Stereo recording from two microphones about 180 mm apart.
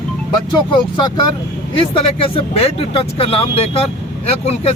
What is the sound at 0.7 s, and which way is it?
Speech, 25° left (ahead or behind).